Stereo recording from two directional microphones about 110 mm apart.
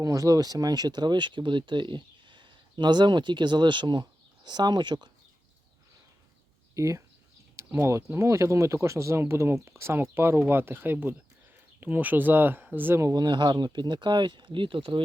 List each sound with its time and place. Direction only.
0.0 s speech: 30° right (ahead or behind)
6.7 s speech: 30° right (ahead or behind)
13.0 s speech: 35° right (ahead or behind); by 15.0 s 50° right (ahead or behind)